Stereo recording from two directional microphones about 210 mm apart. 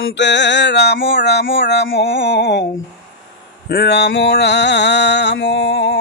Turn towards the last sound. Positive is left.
turn(degrees=60)  # may be behind; listen again after turning